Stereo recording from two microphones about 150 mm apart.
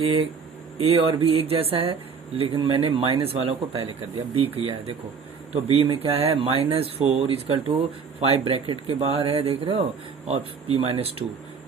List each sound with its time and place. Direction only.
0.0 s speech: 40° right (ahead or behind)